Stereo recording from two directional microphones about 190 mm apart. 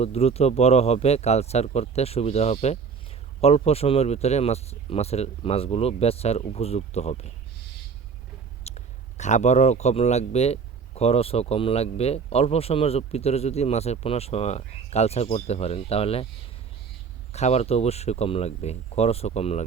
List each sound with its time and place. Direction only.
0.0 s speech: 35° left (ahead or behind)
8.6 s speech: 35° left (ahead or behind)
17.3 s speech: 35° left (ahead or behind)